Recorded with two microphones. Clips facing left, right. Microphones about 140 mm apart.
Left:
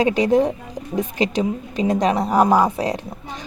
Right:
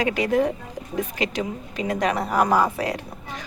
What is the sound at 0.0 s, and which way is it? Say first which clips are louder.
Speech: left 5 dB; 25° left (ahead or behind).